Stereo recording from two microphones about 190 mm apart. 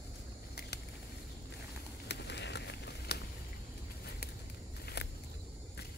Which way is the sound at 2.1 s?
65° left (ahead or behind).